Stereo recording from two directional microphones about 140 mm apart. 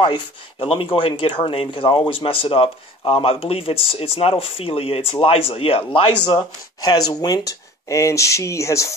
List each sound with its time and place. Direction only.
0.0 s speech: 40° left (ahead or behind); by 8.9 s 20° left (ahead or behind)